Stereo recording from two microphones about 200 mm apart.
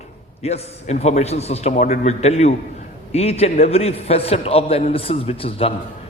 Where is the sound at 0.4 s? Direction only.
30° left (ahead or behind).